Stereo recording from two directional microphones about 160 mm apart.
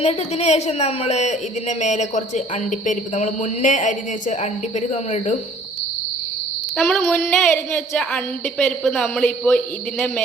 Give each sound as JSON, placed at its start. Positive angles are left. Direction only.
{"t": 0.0, "sound": "a woman's voice", "side_deg": 40}
{"t": 6.7, "sound": "a woman's voice", "side_deg": 0}